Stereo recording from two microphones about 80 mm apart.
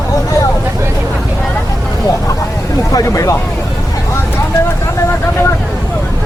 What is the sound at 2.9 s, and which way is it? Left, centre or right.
Speech, left.